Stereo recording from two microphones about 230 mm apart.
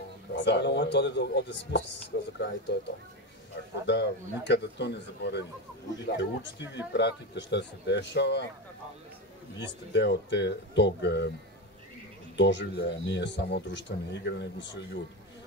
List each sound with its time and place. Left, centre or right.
0.4 s speech: left
3.8 s speech: left
9.6 s speech: left
12.4 s speech: left